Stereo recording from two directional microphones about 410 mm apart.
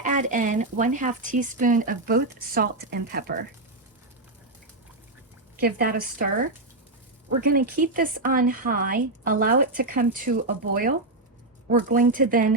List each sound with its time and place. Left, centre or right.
0.0 s speech: centre
5.5 s speech: right